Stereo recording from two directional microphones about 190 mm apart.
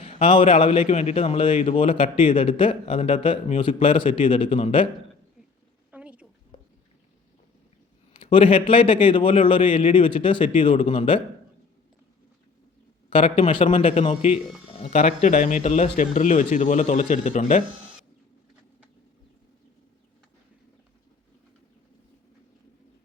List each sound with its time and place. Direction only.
0.0 s a man's voice: 30° left (ahead or behind)
5.9 s a sound: 5° right (ahead or behind)
8.1 s a man's voice: 25° left (ahead or behind)
13.1 s a man's voice: 30° left (ahead or behind)